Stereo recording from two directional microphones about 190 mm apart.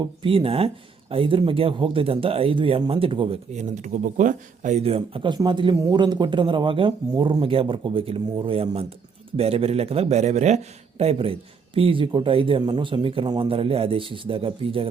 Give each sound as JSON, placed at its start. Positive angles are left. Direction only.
{"t": 0.0, "sound": "speech", "side_deg": -25}